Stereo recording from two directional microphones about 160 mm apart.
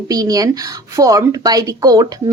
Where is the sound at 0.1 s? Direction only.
20° right (ahead or behind).